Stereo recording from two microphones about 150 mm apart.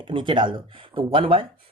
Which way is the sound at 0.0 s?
35° right (ahead or behind).